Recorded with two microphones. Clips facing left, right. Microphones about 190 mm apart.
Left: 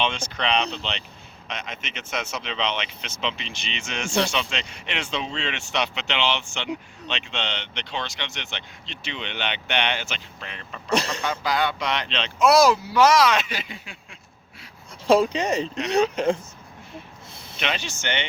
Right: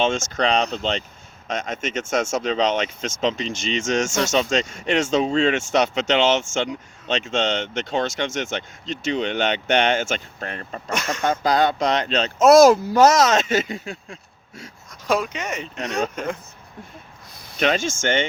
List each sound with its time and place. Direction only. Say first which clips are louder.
0.0 s speech: right 6 dB; 45° right (ahead or behind)
10.8 s speech: left 3 dB; 35° left (ahead or behind)
11.2 s speech: right 6 dB; 45° right (ahead or behind)
15.0 s speech: left 4 dB; 30° left (ahead or behind)
16.0 s speech: left 5 dB; 50° right (ahead or behind)
17.6 s speech: right 8 dB; 45° right (ahead or behind)